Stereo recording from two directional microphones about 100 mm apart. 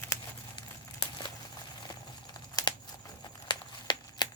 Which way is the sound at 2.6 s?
40° left (ahead or behind).